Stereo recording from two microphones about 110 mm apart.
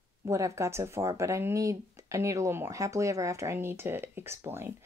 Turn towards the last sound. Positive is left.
turn(degrees=-20)  # may be behind; listen again after turning